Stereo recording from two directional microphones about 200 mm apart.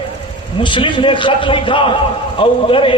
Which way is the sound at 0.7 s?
25° left (ahead or behind).